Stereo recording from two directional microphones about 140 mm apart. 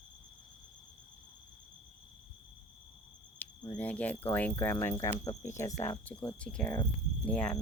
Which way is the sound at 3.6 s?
10° left (ahead or behind).